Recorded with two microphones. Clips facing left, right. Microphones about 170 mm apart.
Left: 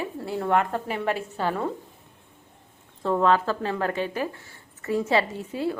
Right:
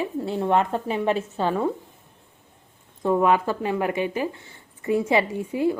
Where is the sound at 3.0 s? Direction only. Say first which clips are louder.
Right 2 dB; 15° right (ahead or behind).